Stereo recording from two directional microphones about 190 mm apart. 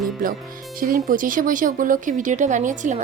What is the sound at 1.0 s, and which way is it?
Speech, 45° right (ahead or behind).